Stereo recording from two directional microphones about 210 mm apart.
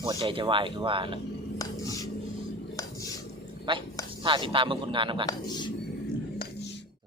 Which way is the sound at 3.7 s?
20° right (ahead or behind).